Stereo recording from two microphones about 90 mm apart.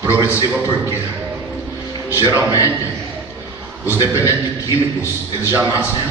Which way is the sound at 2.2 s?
20° right (ahead or behind).